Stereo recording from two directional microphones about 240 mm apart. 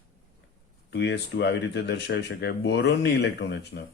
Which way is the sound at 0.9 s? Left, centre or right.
Left.